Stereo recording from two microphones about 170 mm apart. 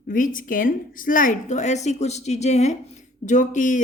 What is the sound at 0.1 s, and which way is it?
Speech, 50° left (ahead or behind).